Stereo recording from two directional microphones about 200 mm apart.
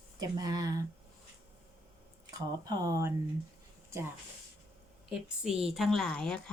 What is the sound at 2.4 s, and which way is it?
Speech, 20° right (ahead or behind).